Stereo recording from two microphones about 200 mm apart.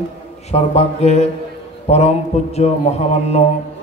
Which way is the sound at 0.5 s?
30° left (ahead or behind).